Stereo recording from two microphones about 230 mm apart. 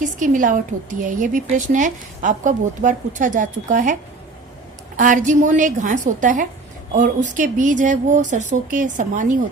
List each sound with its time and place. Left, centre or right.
0.0 s a woman's voice: right
4.9 s a woman's voice: right